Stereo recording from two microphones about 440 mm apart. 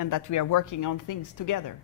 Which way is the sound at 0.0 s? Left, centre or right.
Left.